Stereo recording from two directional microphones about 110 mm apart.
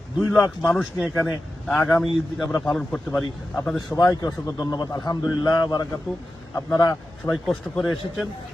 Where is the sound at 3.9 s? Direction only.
30° left (ahead or behind).